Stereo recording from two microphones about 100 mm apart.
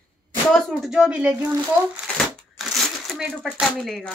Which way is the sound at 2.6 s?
5° right (ahead or behind).